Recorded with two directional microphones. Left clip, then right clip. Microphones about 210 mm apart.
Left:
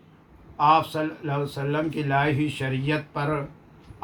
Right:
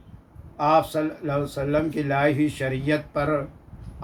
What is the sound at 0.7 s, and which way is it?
Speech, 15° right (ahead or behind).